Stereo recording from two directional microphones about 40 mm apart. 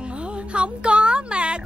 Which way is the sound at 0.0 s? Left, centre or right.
Right.